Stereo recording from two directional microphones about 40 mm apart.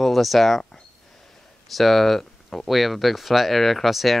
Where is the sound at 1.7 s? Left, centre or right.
Centre.